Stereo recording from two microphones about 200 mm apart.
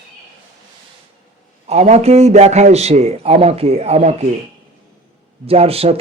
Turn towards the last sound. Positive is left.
turn(degrees=-30)  # may be behind; listen again after turning